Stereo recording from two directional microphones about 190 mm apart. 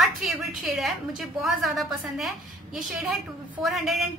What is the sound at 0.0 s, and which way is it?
A woman's voice, centre (ahead or behind).